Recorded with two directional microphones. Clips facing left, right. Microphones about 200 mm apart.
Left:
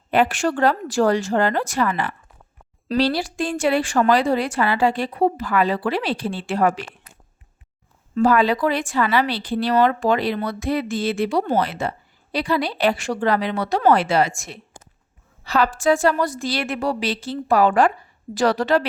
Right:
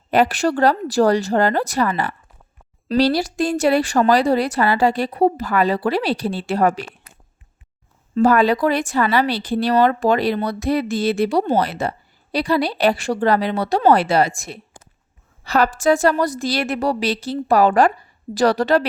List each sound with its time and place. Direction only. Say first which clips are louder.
0.1 s speech: right 2 dB; 40° right (ahead or behind)
8.1 s speech: right 2 dB; 45° right (ahead or behind)